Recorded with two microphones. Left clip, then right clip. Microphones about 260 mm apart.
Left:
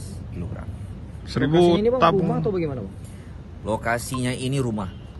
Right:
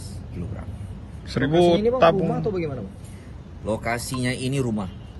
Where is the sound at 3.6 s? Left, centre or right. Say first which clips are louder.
Left 2 dB; centre.